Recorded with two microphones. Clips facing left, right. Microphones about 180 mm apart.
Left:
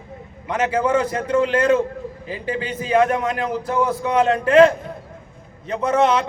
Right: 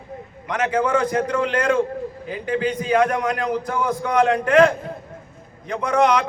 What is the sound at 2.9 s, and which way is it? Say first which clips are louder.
Speech: left 2 dB; 25° left (ahead or behind).